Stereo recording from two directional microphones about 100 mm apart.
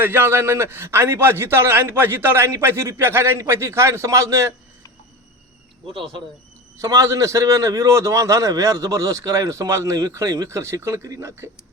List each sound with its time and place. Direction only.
0.0 s a man's voice: 20° right (ahead or behind)
6.7 s a man's voice: 30° right (ahead or behind)